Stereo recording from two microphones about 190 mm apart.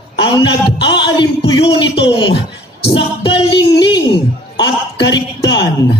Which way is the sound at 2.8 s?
25° left (ahead or behind).